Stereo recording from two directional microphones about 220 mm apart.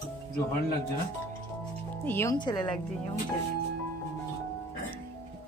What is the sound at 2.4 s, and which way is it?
Speech, 20° left (ahead or behind).